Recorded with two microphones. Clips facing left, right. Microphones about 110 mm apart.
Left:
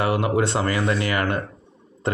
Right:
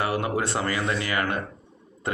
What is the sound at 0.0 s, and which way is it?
Speech, 25° left (ahead or behind).